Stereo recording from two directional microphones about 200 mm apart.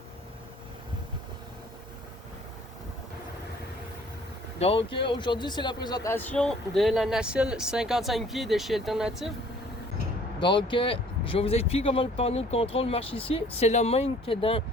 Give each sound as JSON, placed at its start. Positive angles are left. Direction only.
{"t": 4.6, "sound": "speech", "side_deg": 30}
{"t": 10.4, "sound": "speech", "side_deg": 25}